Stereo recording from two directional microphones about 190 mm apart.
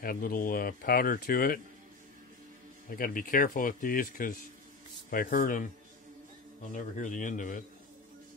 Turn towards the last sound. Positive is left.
turn(degrees=45)  # may be behind; listen again after turning